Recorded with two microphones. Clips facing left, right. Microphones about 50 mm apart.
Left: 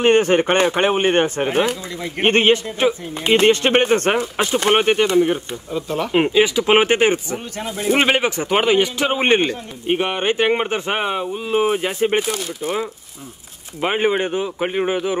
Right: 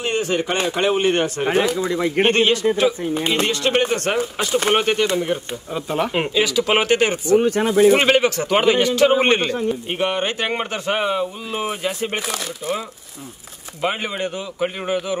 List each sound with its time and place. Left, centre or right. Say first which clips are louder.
0.0 s speech: left 7 dB; left
1.9 s speech: right 8 dB; right
2.2 s a man's voice: left 4 dB; left
5.7 s speech: even; centre
6.3 s a man's voice: left 3 dB; left
7.3 s speech: right 13 dB; right
7.6 s speech: right 9 dB; right
8.0 s a man's voice: right 1 dB; centre
13.7 s a man's voice: left 5 dB; left